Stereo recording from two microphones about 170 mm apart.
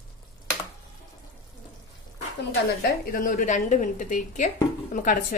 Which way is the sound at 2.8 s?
55° left (ahead or behind).